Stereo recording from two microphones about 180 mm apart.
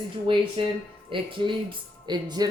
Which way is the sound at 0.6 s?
30° right (ahead or behind).